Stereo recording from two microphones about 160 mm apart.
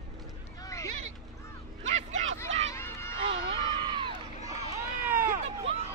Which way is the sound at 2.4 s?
45° right (ahead or behind).